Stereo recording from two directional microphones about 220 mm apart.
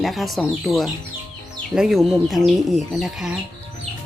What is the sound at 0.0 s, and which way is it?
Speech, centre (ahead or behind).